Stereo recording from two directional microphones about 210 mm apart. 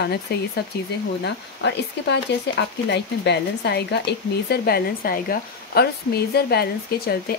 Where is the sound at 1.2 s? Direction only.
55° left (ahead or behind).